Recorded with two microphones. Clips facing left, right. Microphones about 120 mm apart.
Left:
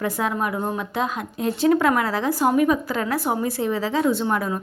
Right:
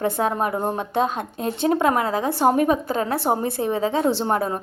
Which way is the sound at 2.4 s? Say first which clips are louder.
Right 1 dB; 35° right (ahead or behind).